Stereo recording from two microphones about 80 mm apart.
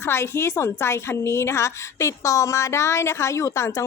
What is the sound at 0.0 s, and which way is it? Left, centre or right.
A woman's voice, left.